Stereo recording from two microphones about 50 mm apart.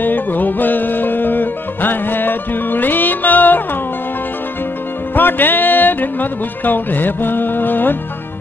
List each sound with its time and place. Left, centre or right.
0.0 s music: left
5.1 s music: left